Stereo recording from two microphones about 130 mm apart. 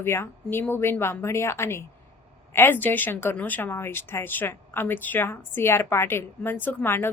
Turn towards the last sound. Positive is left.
turn(degrees=15)  # may be behind; listen again after turning